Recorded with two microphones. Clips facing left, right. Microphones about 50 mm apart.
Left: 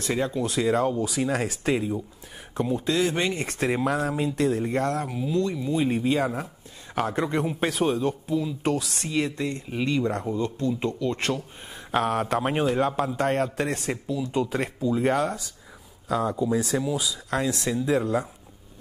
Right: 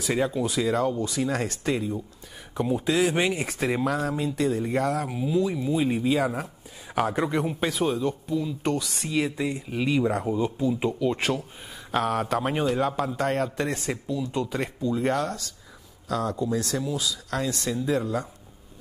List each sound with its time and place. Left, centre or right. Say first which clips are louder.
0.0 s speech: right 1 dB; centre
0.6 s a man's voice: left 2 dB; centre
2.5 s speech: right 1 dB; centre
11.9 s a man's voice: left 1 dB; centre
14.3 s a man's voice: left 2 dB; centre